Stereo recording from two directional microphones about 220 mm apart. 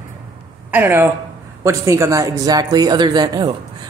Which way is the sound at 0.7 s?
10° right (ahead or behind).